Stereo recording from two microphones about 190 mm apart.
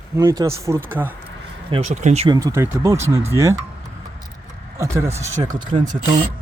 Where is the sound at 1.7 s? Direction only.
35° right (ahead or behind).